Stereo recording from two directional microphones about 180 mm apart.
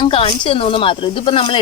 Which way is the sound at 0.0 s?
30° left (ahead or behind).